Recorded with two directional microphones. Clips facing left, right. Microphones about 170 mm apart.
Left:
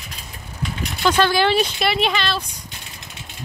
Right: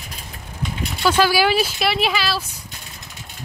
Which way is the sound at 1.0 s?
5° right (ahead or behind).